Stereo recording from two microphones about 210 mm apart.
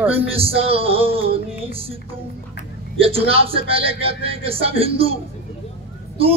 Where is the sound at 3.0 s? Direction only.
25° right (ahead or behind).